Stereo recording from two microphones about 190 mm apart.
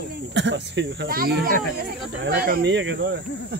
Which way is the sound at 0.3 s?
70° right (ahead or behind).